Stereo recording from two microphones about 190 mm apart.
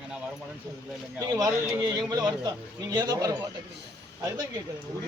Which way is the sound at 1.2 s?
20° right (ahead or behind).